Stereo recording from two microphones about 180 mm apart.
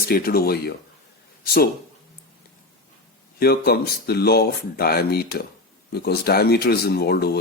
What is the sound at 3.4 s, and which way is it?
A man's voice, 60° left (ahead or behind).